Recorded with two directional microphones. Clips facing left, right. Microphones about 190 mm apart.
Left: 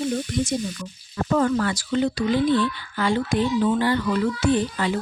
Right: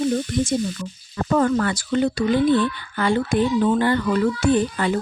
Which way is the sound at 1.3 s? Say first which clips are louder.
Right 2 dB; 55° right (ahead or behind).